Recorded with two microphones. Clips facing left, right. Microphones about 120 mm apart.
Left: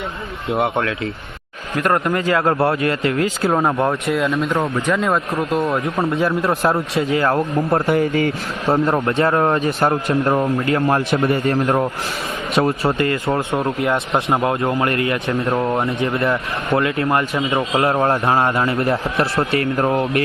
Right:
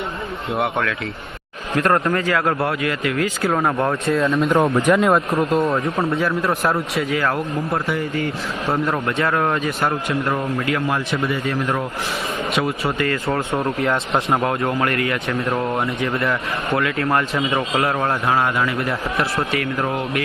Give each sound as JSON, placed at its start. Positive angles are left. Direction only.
{"t": 0.5, "sound": "a man's voice", "side_deg": 25}
{"t": 1.7, "sound": "speech", "side_deg": 5}
{"t": 2.1, "sound": "a man's voice", "side_deg": 25}
{"t": 4.2, "sound": "speech", "side_deg": 0}
{"t": 6.2, "sound": "a man's voice", "side_deg": 25}
{"t": 7.9, "sound": "speech", "side_deg": 55}
{"t": 8.6, "sound": "a man's voice", "side_deg": 30}
{"t": 11.1, "sound": "a man's voice", "side_deg": 50}
{"t": 11.5, "sound": "a man's voice", "side_deg": 30}
{"t": 13.0, "sound": "a man's voice", "side_deg": 25}
{"t": 15.5, "sound": "speech", "side_deg": 0}
{"t": 15.8, "sound": "a man's voice", "side_deg": 25}
{"t": 17.1, "sound": "speech", "side_deg": 15}
{"t": 17.7, "sound": "a man's voice", "side_deg": 25}